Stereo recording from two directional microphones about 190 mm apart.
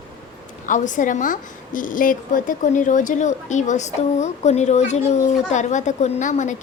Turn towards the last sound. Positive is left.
turn(degrees=40)  # may be behind; listen again after turning